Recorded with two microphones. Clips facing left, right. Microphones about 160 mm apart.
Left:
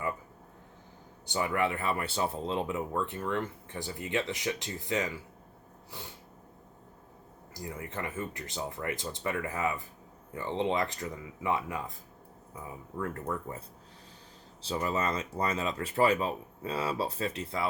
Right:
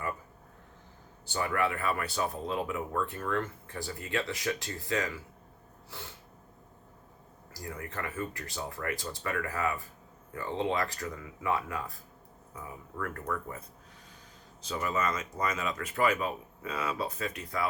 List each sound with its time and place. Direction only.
1.3 s speech: 20° left (ahead or behind)
7.5 s speech: 20° left (ahead or behind)
13.0 s speech: 25° left (ahead or behind)